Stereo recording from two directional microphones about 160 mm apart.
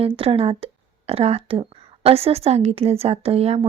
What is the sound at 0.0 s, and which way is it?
Speech, 35° right (ahead or behind).